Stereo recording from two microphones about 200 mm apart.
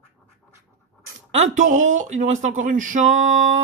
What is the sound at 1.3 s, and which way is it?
Speech, 35° right (ahead or behind).